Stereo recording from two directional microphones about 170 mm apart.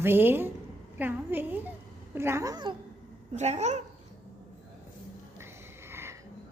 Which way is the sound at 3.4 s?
40° right (ahead or behind).